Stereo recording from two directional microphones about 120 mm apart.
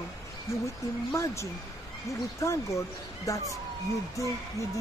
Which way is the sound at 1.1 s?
25° left (ahead or behind).